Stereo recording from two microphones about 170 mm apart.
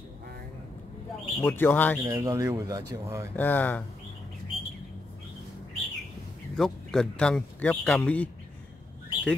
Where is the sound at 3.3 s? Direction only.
10° left (ahead or behind).